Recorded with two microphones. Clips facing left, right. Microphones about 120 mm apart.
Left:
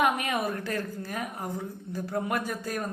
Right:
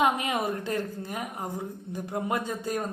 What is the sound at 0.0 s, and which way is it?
A woman's voice, 20° right (ahead or behind).